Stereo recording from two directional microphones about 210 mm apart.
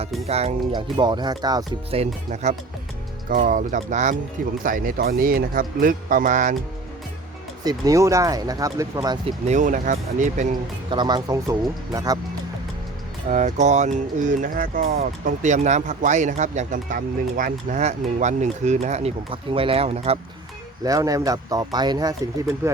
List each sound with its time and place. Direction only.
0.3 s speech: 30° right (ahead or behind)
2.3 s speech: 35° right (ahead or behind)
7.6 s speech: 15° right (ahead or behind)
9.2 s speech: 35° right (ahead or behind)
10.8 s speech: 20° right (ahead or behind)
13.3 s speech: 35° right (ahead or behind)
20.8 s speech: 15° right (ahead or behind)